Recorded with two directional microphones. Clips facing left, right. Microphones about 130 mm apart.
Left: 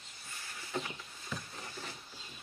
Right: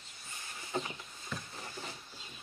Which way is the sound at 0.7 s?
30° right (ahead or behind).